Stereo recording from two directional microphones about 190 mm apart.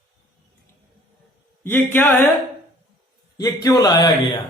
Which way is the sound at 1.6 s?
10° left (ahead or behind).